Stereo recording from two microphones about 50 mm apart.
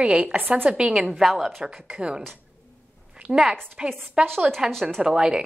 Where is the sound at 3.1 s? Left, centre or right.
Right.